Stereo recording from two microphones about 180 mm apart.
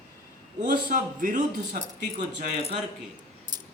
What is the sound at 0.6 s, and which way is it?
A man's voice, 50° right (ahead or behind).